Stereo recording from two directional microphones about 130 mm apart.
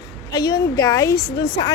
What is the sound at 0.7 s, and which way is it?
Speech, 25° left (ahead or behind).